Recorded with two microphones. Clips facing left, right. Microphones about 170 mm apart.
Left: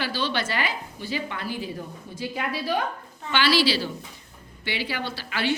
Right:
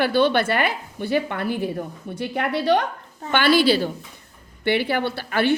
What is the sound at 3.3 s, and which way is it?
A woman's voice, 55° right (ahead or behind).